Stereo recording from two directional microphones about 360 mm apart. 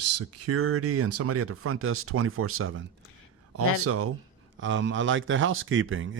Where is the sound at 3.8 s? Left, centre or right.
Right.